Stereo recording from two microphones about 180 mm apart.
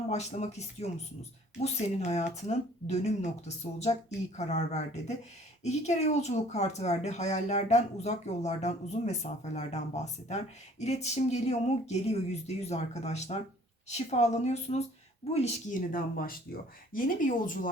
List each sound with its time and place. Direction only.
0.1 s speech: 35° left (ahead or behind)